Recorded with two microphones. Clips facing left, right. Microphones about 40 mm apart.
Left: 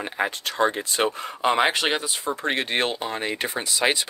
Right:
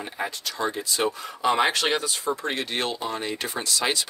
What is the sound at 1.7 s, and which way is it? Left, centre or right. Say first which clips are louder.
Speech: even; left.